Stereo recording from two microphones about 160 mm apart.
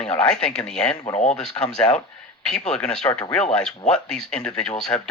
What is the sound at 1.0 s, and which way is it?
Speech, 45° left (ahead or behind).